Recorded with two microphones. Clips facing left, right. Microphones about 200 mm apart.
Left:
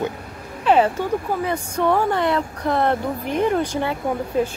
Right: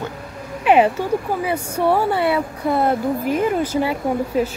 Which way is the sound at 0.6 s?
10° right (ahead or behind).